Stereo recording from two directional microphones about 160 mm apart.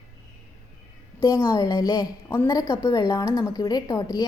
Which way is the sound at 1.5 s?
20° left (ahead or behind).